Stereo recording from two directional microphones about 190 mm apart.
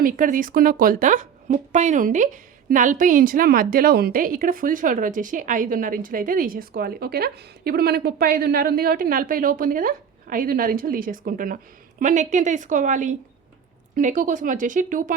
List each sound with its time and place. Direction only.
0.0 s speech: 45° right (ahead or behind)